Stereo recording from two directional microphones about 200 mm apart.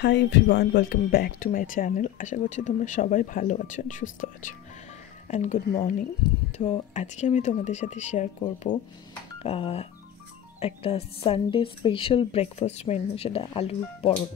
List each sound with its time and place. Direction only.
0.0 s speech: 60° left (ahead or behind); by 8.3 s 35° left (ahead or behind)
9.4 s a woman's voice: 30° left (ahead or behind)